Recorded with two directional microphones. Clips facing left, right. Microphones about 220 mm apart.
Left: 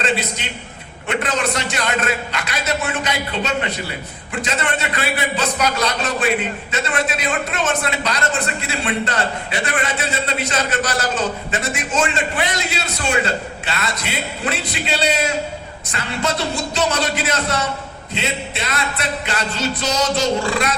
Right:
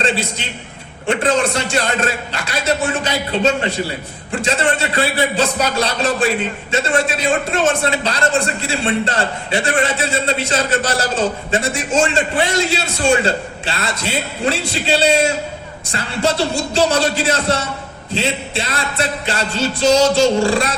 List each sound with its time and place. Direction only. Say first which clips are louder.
0.4 s a man's voice: right 1 dB; 30° right (ahead or behind)